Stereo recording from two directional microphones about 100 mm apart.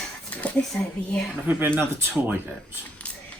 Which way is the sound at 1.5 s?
20° right (ahead or behind).